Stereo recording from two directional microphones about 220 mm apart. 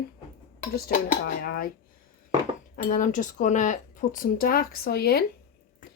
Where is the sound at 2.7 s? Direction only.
40° left (ahead or behind).